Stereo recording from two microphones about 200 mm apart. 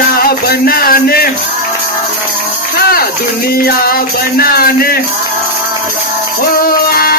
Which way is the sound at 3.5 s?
50° left (ahead or behind).